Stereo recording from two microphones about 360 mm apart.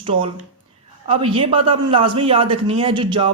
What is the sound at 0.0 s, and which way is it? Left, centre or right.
Speech, centre.